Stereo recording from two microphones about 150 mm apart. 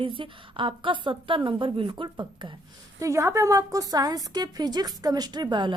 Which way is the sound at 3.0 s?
20° right (ahead or behind).